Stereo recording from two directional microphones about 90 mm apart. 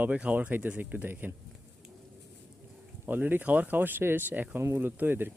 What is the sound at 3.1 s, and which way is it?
Speech, 20° right (ahead or behind).